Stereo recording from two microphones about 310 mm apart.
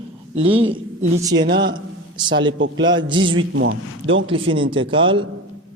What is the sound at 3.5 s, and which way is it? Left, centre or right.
Speech, right.